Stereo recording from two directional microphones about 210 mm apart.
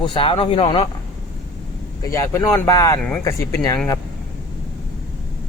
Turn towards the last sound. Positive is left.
turn(degrees=15)  # may be behind; listen again after turning